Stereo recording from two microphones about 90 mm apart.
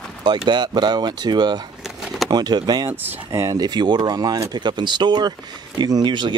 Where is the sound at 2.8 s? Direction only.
35° right (ahead or behind).